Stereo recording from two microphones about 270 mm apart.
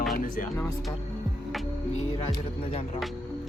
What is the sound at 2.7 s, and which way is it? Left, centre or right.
Speech, left.